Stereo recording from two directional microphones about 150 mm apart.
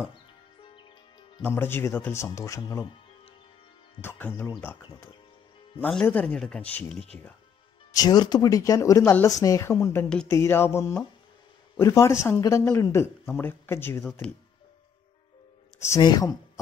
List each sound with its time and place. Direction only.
0.1 s music: 35° left (ahead or behind)
1.4 s speech: 15° left (ahead or behind)
4.0 s speech: 15° left (ahead or behind)
5.8 s speech: 5° left (ahead or behind)
7.9 s speech: 25° left (ahead or behind)
16.0 s speech: 30° left (ahead or behind)